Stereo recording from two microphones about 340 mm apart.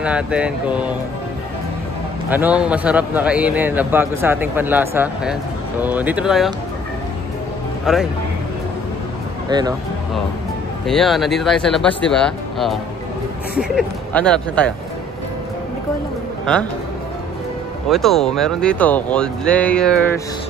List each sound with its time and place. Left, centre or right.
0.0 s a man's voice: centre
2.2 s a man's voice: centre
7.8 s speech: centre
9.5 s speech: centre
10.9 s a man's voice: centre
17.8 s a man's voice: centre